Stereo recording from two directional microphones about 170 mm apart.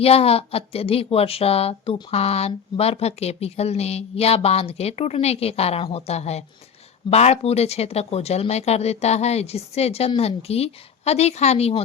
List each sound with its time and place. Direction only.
0.0 s a woman's voice: 35° left (ahead or behind)